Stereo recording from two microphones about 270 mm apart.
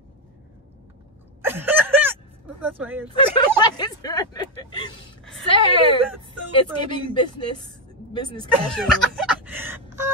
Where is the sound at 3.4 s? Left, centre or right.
Centre.